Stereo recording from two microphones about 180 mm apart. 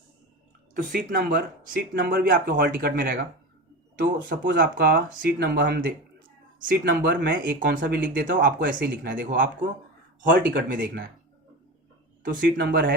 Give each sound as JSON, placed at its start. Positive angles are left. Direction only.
{"t": 0.7, "sound": "speech", "side_deg": -55}
{"t": 7.1, "sound": "speech", "side_deg": -70}
{"t": 10.5, "sound": "speech", "side_deg": -60}
{"t": 12.2, "sound": "speech", "side_deg": -60}